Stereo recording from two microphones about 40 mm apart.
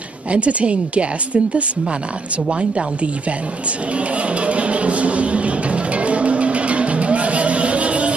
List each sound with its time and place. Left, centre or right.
0.3 s a woman's voice: right
4.3 s music: right